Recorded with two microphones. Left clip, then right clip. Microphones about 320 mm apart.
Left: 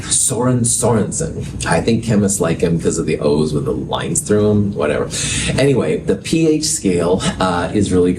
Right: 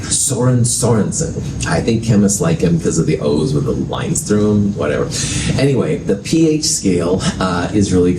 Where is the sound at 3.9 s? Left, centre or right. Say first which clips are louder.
Left 1 dB; left.